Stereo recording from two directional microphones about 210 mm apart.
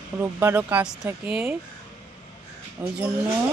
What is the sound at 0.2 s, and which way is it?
Speech, 10° right (ahead or behind).